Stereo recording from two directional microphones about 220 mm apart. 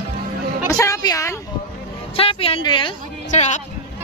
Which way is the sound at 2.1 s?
25° left (ahead or behind).